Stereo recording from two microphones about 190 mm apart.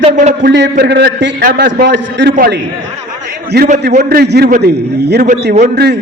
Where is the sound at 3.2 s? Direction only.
60° right (ahead or behind).